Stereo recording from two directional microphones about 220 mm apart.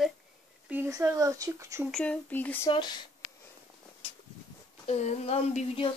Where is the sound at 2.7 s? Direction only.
20° left (ahead or behind).